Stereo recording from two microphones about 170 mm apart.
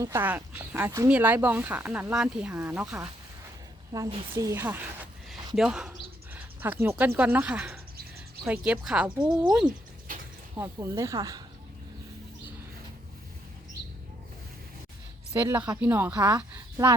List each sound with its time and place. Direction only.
0.0 s speech: 15° right (ahead or behind)
3.9 s speech: 20° right (ahead or behind)
10.6 s speech: 20° right (ahead or behind)
15.3 s speech: 15° right (ahead or behind)